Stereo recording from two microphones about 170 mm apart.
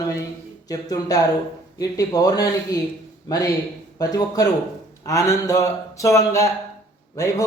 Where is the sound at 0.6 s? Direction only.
20° left (ahead or behind).